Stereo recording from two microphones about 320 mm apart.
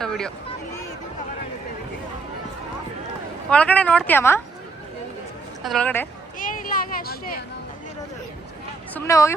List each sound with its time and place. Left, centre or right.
0.0 s speech: centre
3.5 s a woman's voice: centre
5.6 s a woman's voice: centre
6.4 s a sound: left
9.0 s speech: centre